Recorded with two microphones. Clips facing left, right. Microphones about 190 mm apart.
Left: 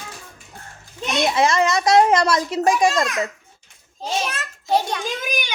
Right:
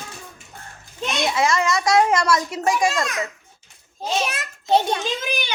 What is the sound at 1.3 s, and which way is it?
A child's voice, 20° left (ahead or behind).